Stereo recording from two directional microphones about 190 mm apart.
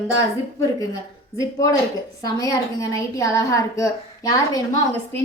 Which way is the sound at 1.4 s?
20° left (ahead or behind).